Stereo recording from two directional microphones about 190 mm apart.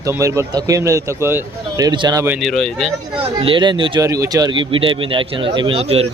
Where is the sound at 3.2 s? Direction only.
30° right (ahead or behind).